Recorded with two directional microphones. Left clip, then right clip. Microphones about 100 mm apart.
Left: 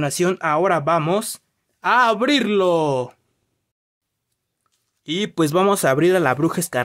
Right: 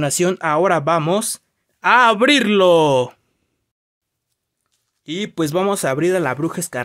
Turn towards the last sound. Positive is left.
turn(degrees=15)  # may be behind; listen again after turning